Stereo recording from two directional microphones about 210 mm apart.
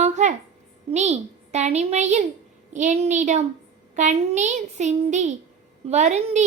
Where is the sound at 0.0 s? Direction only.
35° right (ahead or behind).